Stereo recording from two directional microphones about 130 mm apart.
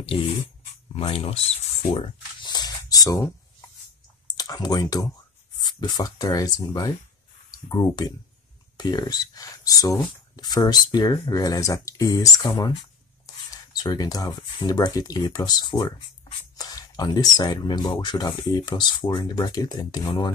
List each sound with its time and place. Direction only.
0.0 s speech: 45° left (ahead or behind)
2.4 s a sound: 30° left (ahead or behind)
4.4 s speech: 30° left (ahead or behind)
13.7 s speech: 30° left (ahead or behind)